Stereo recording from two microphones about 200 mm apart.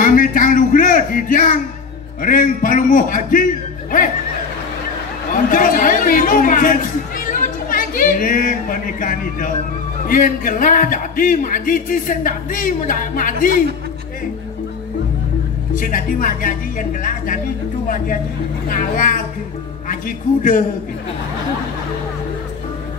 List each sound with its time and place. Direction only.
0.0 s a man's voice: 40° left (ahead or behind)
5.3 s speech: 45° left (ahead or behind)
15.7 s speech: 45° left (ahead or behind)